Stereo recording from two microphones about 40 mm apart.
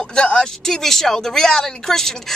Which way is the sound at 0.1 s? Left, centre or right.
Left.